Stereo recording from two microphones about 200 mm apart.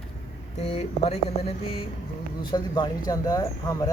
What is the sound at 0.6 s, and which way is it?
A man's voice, 30° left (ahead or behind).